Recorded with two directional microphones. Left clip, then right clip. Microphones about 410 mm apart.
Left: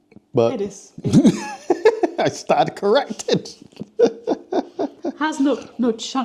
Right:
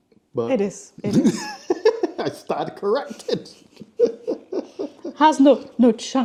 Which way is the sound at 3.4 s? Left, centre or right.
Left.